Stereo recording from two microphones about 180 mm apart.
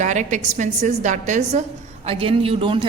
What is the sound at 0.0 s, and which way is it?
A woman's voice, 45° right (ahead or behind).